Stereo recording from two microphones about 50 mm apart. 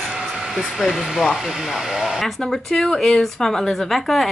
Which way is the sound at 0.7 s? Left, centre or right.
Centre.